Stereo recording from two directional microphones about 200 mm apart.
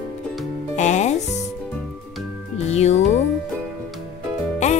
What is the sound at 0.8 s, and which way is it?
Speech, 35° left (ahead or behind).